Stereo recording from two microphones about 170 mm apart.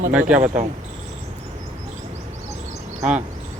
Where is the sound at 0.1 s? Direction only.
5° right (ahead or behind).